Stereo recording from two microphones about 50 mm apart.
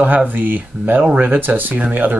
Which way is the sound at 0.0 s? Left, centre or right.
Right.